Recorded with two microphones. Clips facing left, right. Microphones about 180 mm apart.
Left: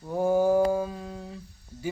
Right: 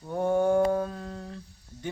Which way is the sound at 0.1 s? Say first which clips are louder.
Left 2 dB; 5° left (ahead or behind).